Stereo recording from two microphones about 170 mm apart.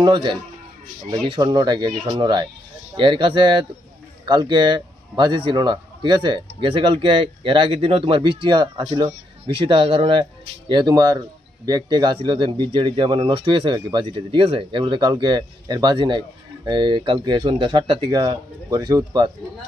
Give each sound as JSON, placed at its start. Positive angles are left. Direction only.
{"t": 0.0, "sound": "speech", "side_deg": -25}